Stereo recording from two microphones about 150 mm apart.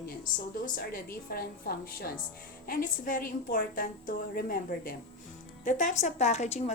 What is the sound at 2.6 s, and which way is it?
A woman's voice, 65° left (ahead or behind).